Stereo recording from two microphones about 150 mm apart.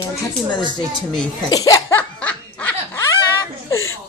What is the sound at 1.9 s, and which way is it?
Laughter, 10° left (ahead or behind).